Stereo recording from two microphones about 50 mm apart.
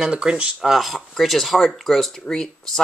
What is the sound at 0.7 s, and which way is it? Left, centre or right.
Speech, centre.